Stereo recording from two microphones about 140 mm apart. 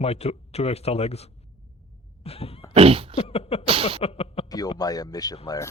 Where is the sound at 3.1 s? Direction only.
45° left (ahead or behind).